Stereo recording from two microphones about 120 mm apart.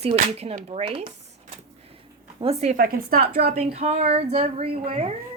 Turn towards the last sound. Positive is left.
turn(degrees=-55)  # may be behind; listen again after turning